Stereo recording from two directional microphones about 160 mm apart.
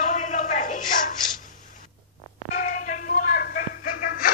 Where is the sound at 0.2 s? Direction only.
55° left (ahead or behind).